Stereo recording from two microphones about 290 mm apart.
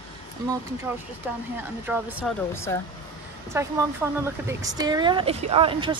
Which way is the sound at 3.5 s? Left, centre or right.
Centre.